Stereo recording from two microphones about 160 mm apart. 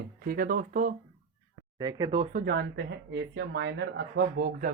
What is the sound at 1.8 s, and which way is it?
Speech, 25° right (ahead or behind).